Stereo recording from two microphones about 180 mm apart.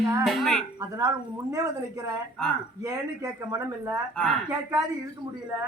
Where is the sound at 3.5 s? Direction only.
15° right (ahead or behind).